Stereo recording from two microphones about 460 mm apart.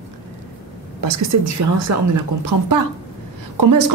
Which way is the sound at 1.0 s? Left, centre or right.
Right.